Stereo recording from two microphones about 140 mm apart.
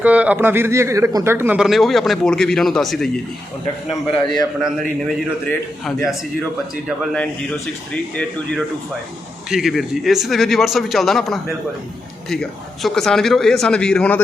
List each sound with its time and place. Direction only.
0.0 s speech: 10° right (ahead or behind)
1.5 s speech: centre (ahead or behind)
4.1 s speech: centre (ahead or behind)
8.1 s a man's voice: 10° left (ahead or behind)
9.5 s speech: centre (ahead or behind)